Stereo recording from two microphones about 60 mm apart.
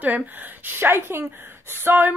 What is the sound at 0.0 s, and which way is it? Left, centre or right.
Speech, right.